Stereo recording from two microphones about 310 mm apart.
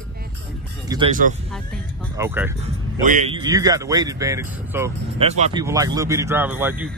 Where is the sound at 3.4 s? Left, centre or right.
Centre.